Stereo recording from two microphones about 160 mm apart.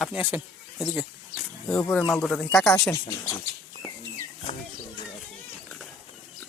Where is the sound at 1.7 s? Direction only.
10° left (ahead or behind).